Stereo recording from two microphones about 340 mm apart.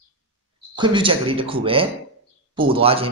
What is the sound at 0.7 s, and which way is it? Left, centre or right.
Speech, centre.